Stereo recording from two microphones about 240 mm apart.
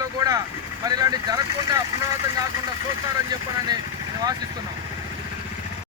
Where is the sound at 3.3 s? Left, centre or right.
Centre.